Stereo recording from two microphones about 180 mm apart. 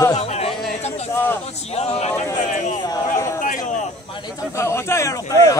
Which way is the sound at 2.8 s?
20° left (ahead or behind).